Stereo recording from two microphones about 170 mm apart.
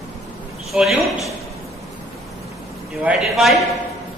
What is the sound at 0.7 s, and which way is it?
Speech, centre (ahead or behind).